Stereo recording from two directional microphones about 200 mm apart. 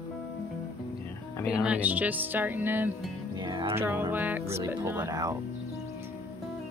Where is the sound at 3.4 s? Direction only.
20° right (ahead or behind).